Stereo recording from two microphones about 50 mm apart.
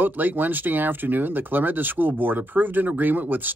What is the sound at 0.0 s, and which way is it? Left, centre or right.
Speech, right.